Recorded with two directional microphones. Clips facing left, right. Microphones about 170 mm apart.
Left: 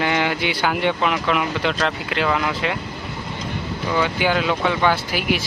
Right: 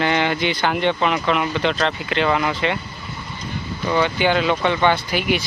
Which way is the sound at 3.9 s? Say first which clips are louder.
Right 2 dB; 5° left (ahead or behind).